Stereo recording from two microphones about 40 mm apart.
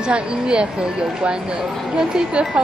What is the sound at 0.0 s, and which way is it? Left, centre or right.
Speech, right.